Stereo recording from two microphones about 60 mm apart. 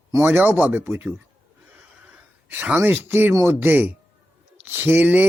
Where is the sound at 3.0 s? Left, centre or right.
Right.